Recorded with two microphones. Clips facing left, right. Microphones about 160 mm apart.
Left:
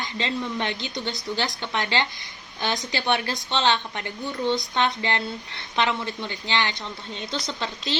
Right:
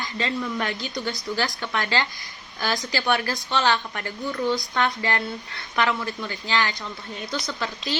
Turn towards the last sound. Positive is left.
turn(degrees=25)  # may be behind; listen again after turning